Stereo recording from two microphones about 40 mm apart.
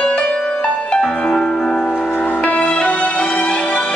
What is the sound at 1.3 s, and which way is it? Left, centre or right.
Music, centre.